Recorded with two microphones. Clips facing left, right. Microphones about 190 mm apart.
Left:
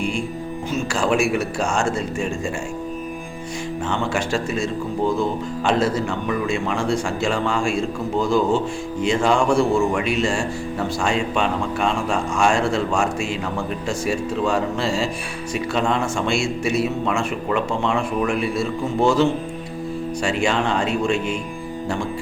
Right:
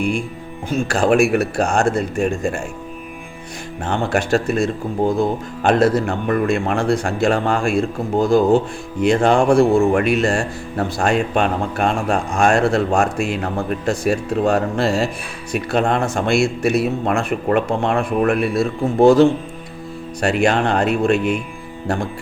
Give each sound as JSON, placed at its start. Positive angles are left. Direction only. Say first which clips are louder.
{"t": 0.7, "sound": "speech", "louder": "right 5 dB", "side_deg": -55}
{"t": 3.8, "sound": "speech", "louder": "right 5 dB", "side_deg": -55}